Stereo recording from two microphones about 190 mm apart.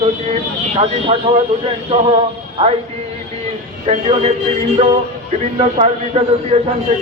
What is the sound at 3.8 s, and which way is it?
Speech, 30° right (ahead or behind).